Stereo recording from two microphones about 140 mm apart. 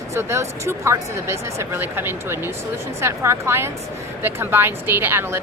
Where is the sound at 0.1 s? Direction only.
20° right (ahead or behind).